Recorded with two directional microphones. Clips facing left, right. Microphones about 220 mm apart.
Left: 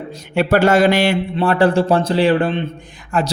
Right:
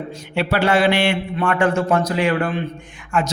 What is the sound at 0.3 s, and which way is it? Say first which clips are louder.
A man's voice: left 5 dB; 45° left (ahead or behind).